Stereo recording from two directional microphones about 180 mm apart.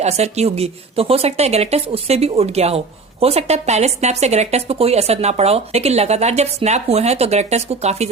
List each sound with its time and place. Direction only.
0.0 s speech: 35° right (ahead or behind)